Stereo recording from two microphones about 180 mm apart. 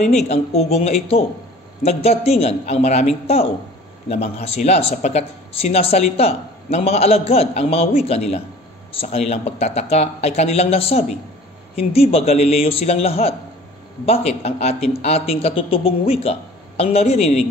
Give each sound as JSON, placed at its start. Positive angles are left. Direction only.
{"t": 0.0, "sound": "speech", "side_deg": 40}